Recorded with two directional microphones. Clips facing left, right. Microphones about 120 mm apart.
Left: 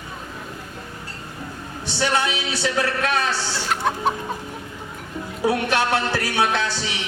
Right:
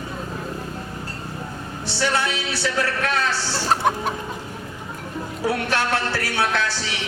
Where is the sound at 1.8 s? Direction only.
15° left (ahead or behind).